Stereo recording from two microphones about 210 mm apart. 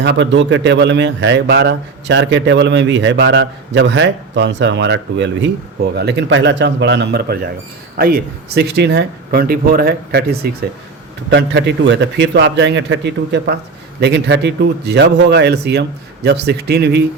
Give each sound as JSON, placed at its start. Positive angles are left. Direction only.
{"t": 0.0, "sound": "speech", "side_deg": -60}